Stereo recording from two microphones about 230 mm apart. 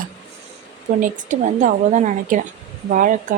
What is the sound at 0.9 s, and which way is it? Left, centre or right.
Speech, right.